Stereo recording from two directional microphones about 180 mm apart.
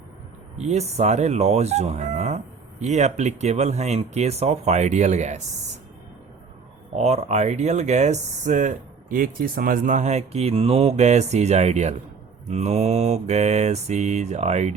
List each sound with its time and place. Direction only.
0.6 s speech: 40° right (ahead or behind)
6.9 s speech: 35° right (ahead or behind)